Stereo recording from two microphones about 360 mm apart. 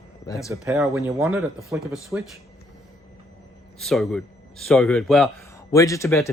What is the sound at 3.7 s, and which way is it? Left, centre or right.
A man's voice, centre.